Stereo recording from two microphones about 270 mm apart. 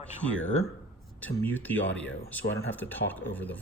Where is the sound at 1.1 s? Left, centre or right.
Centre.